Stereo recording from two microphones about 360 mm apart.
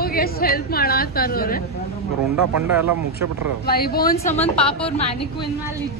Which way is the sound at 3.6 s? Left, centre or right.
Left.